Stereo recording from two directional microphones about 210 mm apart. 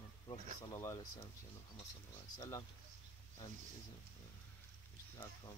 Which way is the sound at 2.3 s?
15° left (ahead or behind).